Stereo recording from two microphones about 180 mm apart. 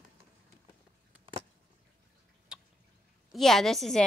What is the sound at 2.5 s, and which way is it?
Drip, 5° right (ahead or behind).